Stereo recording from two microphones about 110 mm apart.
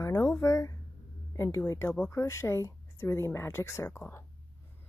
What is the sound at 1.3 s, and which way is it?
Speech, 25° left (ahead or behind).